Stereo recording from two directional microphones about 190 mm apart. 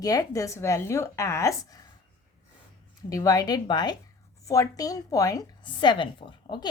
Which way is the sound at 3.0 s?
20° left (ahead or behind).